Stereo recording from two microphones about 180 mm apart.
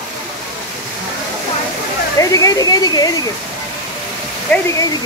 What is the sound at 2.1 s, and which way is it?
Speech, 20° left (ahead or behind).